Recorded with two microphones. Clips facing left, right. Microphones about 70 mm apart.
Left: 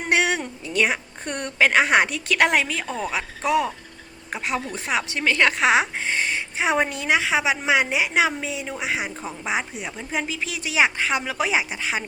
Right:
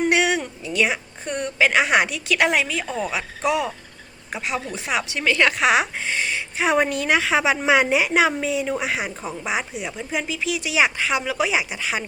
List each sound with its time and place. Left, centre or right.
0.1 s a woman's voice: left
6.6 s a woman's voice: centre
9.5 s speech: left